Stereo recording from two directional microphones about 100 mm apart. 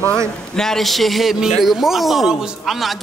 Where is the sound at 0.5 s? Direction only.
5° left (ahead or behind).